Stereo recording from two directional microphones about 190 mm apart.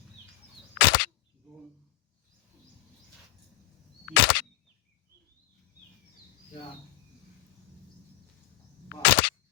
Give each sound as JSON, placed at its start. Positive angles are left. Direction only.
{"t": 0.8, "sound": "single-lens reflex camera", "side_deg": 75}
{"t": 4.1, "sound": "single-lens reflex camera", "side_deg": 70}
{"t": 9.0, "sound": "a sound", "side_deg": 65}